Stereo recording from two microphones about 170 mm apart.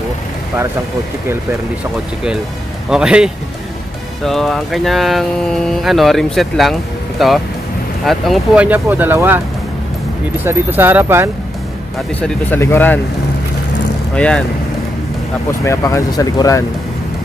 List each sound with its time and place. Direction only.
2.9 s speech: 5° right (ahead or behind)
8.6 s speech: 10° right (ahead or behind)
10.4 s speech: 15° right (ahead or behind)
12.2 s speech: 10° left (ahead or behind)
14.1 s speech: 5° left (ahead or behind)
15.6 s speech: 15° left (ahead or behind)